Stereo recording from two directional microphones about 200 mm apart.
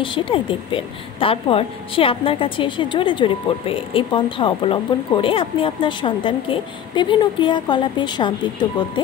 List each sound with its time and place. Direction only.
0.0 s a woman's voice: 25° left (ahead or behind)